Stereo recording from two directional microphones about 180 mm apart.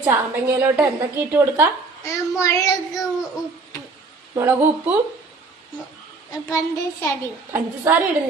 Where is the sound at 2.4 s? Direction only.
15° left (ahead or behind).